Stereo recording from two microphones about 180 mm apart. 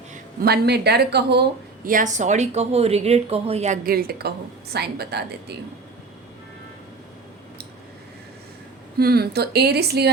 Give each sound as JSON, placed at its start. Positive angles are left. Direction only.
{"t": 0.4, "sound": "speech", "side_deg": -65}
{"t": 3.8, "sound": "a woman's voice", "side_deg": -60}
{"t": 9.0, "sound": "a woman's voice", "side_deg": -60}